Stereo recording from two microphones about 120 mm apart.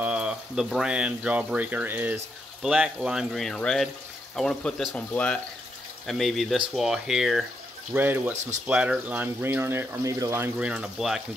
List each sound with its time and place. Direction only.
0.0 s frying: 10° right (ahead or behind)
0.7 s speech: 5° right (ahead or behind)
7.9 s speech: 15° right (ahead or behind)
10.6 s speech: 10° right (ahead or behind)